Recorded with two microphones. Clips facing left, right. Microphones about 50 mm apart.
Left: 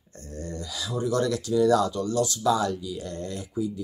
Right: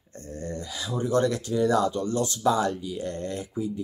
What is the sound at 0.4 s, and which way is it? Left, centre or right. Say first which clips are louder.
Speech: even; right.